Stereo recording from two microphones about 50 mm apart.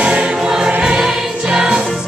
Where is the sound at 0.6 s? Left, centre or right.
Right.